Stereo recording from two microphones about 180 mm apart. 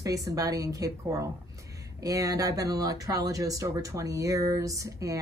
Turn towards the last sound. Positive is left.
turn(degrees=-20)  # may be behind; listen again after turning